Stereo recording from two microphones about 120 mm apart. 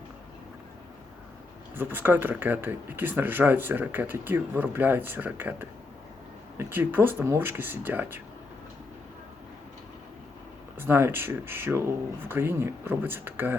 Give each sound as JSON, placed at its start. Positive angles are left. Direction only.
{"t": 1.7, "sound": "speech", "side_deg": -15}
{"t": 10.8, "sound": "speech", "side_deg": -20}